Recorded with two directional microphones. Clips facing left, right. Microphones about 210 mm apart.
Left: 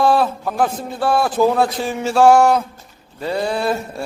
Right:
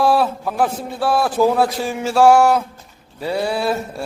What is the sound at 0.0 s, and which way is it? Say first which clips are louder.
A man's voice: even; 5° right (ahead or behind).